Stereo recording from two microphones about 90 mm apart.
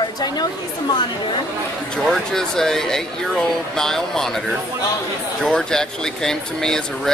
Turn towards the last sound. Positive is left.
turn(degrees=5)  # may be behind; listen again after turning